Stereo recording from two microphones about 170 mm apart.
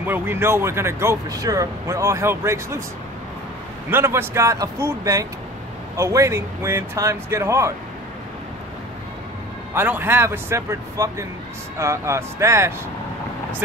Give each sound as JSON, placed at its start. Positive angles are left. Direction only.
{"t": 0.0, "sound": "speech", "side_deg": -10}
{"t": 3.9, "sound": "speech", "side_deg": -15}
{"t": 9.8, "sound": "speech", "side_deg": -10}